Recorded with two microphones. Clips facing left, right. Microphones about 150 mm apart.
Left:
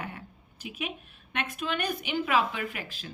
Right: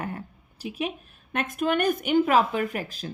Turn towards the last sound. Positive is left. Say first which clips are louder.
# right 8 dB
turn(degrees=-40)  # may be behind; listen again after turning